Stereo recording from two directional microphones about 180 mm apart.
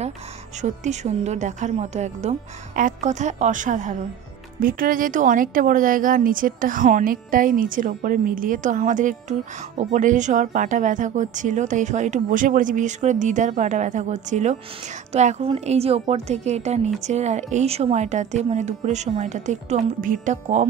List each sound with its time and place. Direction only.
0.6 s a woman's voice: 40° right (ahead or behind)